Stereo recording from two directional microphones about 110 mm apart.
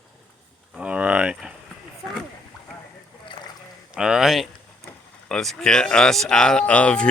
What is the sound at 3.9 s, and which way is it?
Speech, 5° right (ahead or behind).